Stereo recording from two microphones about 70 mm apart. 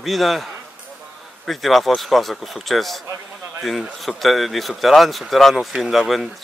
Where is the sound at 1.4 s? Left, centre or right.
Centre.